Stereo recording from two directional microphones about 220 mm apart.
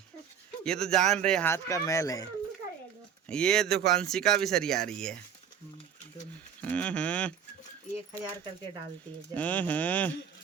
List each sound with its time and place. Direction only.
0.6 s speech: 5° left (ahead or behind)
3.2 s speech: 5° left (ahead or behind)
6.6 s speech: 5° left (ahead or behind)
9.3 s speech: 5° left (ahead or behind)